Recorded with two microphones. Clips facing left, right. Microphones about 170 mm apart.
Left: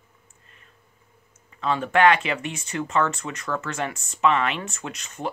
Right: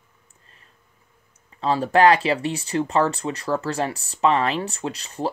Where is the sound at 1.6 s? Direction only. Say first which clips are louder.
Right 3 dB; 35° right (ahead or behind).